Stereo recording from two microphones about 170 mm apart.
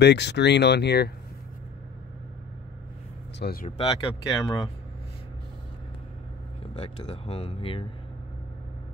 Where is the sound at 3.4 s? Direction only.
60° left (ahead or behind).